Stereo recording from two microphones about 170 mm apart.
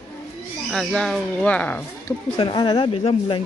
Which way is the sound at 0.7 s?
5° left (ahead or behind).